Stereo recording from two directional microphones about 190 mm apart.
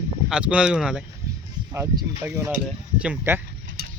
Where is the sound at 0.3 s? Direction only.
5° right (ahead or behind).